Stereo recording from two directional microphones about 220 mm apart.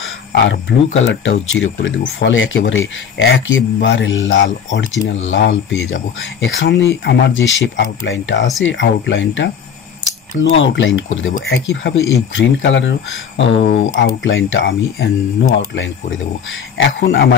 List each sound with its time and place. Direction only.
0.3 s speech: 55° left (ahead or behind)
4.4 s speech: 35° left (ahead or behind)
5.0 s speech: 60° left (ahead or behind)
11.3 s speech: 45° left (ahead or behind)